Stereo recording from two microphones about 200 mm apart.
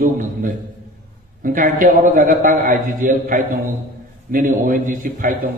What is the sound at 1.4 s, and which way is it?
A man's voice, 40° right (ahead or behind).